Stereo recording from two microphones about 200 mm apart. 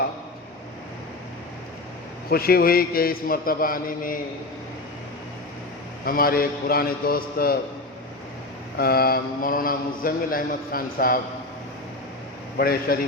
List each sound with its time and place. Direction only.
2.3 s a man's voice: 50° left (ahead or behind)
6.1 s a man's voice: 45° left (ahead or behind)
8.8 s a man's voice: 50° left (ahead or behind)
12.5 s a man's voice: 50° left (ahead or behind)